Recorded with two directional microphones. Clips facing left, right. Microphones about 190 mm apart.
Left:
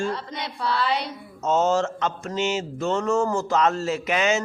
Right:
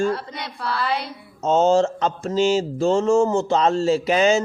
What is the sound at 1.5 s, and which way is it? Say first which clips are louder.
Mantra: right 4 dB; 30° right (ahead or behind).